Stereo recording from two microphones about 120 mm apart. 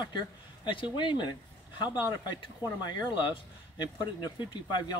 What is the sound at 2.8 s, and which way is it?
Speech, 40° left (ahead or behind).